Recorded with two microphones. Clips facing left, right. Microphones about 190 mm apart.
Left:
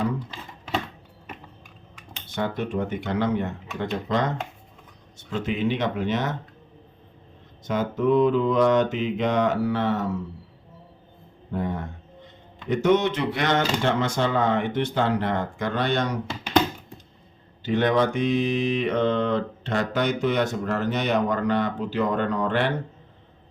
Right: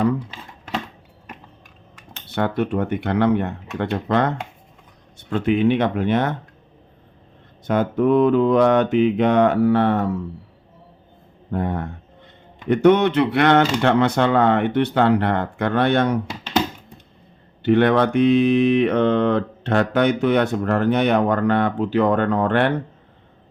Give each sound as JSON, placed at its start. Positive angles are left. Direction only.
{"t": 2.3, "sound": "mantra", "side_deg": -60}
{"t": 7.7, "sound": "mantra", "side_deg": -55}
{"t": 11.5, "sound": "a sound", "side_deg": -60}
{"t": 12.6, "sound": "mantra", "side_deg": -60}
{"t": 17.6, "sound": "mantra", "side_deg": -60}